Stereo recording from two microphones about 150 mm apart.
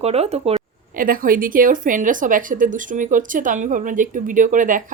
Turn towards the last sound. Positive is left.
turn(degrees=-60)  # may be behind; listen again after turning